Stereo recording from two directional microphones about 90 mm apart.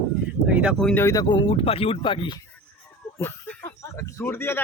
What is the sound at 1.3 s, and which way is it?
Speech, 75° left (ahead or behind).